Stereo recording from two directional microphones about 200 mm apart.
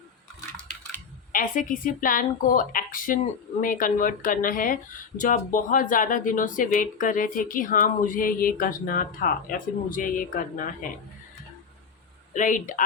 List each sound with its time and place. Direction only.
0.5 s a sound: 5° left (ahead or behind)
1.3 s speech: 45° left (ahead or behind)
12.3 s speech: 40° left (ahead or behind)